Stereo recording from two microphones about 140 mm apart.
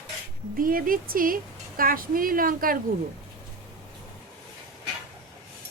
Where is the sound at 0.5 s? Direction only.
90° right.